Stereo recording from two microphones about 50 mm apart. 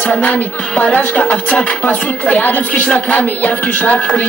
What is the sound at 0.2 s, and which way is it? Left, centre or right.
Music, left.